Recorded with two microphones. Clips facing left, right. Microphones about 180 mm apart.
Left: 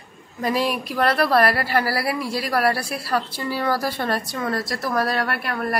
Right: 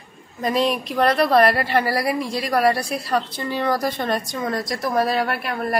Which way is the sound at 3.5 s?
5° left (ahead or behind).